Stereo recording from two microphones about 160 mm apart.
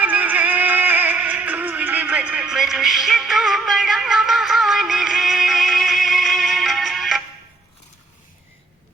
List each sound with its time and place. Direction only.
0.0 s music: 10° right (ahead or behind)